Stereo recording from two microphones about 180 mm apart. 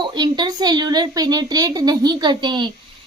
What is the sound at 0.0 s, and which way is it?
A child's voice, 25° right (ahead or behind).